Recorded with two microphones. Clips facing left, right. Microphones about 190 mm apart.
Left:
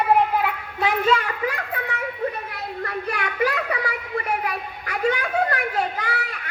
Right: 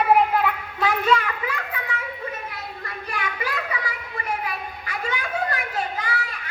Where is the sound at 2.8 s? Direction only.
65° left (ahead or behind).